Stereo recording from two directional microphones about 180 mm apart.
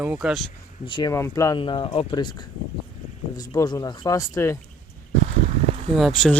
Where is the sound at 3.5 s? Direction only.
20° left (ahead or behind).